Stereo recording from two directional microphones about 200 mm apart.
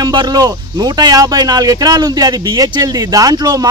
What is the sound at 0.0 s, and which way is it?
Speech, 20° right (ahead or behind).